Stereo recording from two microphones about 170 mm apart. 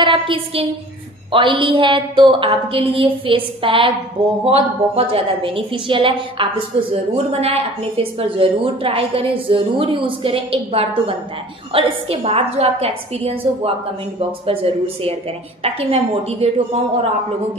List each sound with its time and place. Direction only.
0.0 s a woman's voice: 30° right (ahead or behind)